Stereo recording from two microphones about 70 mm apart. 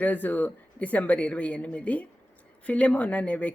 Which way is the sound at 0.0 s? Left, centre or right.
Left.